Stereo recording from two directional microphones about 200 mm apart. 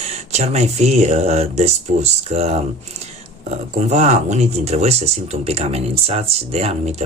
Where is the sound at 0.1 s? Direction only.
35° right (ahead or behind).